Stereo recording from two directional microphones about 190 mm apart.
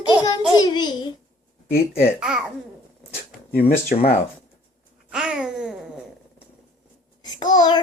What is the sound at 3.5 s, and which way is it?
Speech, 55° left (ahead or behind).